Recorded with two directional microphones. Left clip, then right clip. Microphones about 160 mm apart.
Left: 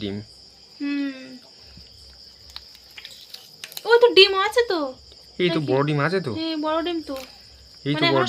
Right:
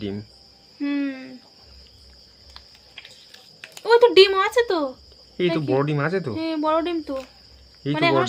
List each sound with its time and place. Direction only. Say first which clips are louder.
0.0 s speech: even; 5° right (ahead or behind)
0.8 s cricket: right 1 dB; 5° right (ahead or behind)
3.6 s a child's voice: even; 10° right (ahead or behind)